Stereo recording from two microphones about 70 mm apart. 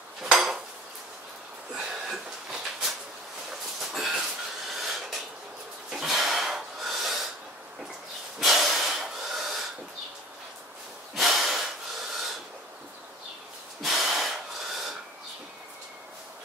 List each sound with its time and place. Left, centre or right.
0.2 s dishes: centre
1.8 s a sound: centre
8.4 s snort: centre
11.1 s snort: centre
13.8 s snort: centre